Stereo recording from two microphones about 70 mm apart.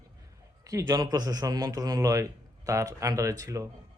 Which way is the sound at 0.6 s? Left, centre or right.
Right.